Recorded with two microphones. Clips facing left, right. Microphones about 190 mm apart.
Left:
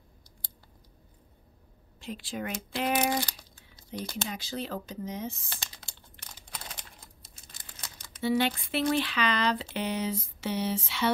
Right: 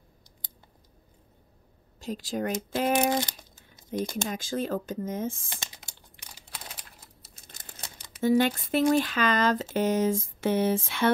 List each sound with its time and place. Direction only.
2.0 s speech: 40° right (ahead or behind)
3.2 s speech: 20° right (ahead or behind)
4.3 s speech: 45° right (ahead or behind)
5.5 s computer keyboard: 15° right (ahead or behind)
7.5 s crumpling: 45° right (ahead or behind)
8.2 s speech: 45° right (ahead or behind)